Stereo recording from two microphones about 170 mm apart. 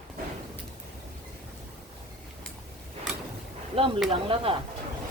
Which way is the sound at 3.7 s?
35° right (ahead or behind).